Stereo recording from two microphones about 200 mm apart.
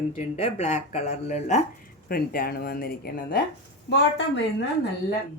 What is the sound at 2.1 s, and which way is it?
Speech, 50° left (ahead or behind).